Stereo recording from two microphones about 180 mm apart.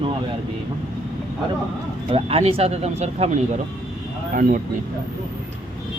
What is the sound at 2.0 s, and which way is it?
Speech, 35° right (ahead or behind).